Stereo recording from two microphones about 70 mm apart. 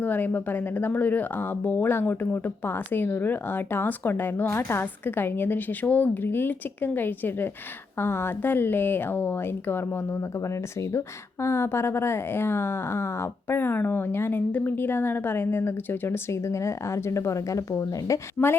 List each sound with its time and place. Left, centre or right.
0.0 s a woman's voice: left